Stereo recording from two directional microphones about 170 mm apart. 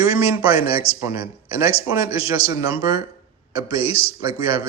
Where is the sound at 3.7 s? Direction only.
35° left (ahead or behind).